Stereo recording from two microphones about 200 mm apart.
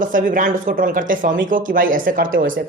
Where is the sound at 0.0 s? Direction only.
40° right (ahead or behind).